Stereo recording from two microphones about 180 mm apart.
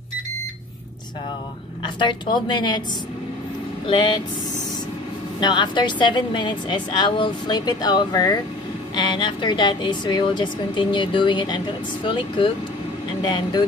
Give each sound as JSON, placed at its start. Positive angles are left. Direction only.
{"t": 2.0, "sound": "speech", "side_deg": 25}
{"t": 3.8, "sound": "speech", "side_deg": 25}
{"t": 5.4, "sound": "speech", "side_deg": 25}